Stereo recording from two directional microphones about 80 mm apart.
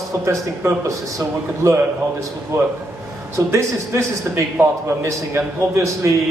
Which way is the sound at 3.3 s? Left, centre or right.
Right.